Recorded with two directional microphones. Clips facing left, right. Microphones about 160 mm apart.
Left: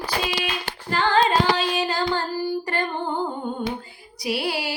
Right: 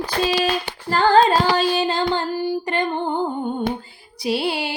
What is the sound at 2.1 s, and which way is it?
Child singing, 20° right (ahead or behind).